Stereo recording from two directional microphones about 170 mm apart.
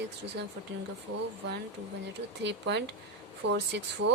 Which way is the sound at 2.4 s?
90° right.